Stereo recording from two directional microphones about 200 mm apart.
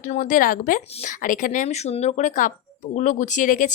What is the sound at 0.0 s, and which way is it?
Speech, 40° left (ahead or behind).